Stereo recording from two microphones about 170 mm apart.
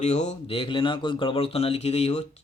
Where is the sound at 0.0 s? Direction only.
40° left (ahead or behind).